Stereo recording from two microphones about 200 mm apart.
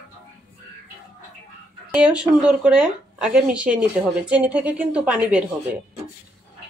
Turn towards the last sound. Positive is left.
turn(degrees=-5)  # may be behind; listen again after turning